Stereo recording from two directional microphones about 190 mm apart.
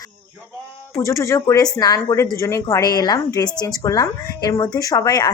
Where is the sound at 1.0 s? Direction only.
15° left (ahead or behind).